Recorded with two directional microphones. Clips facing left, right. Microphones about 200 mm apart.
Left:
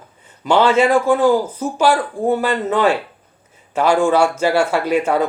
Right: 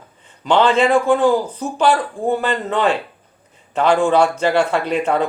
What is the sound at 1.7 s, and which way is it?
Speech, 10° left (ahead or behind).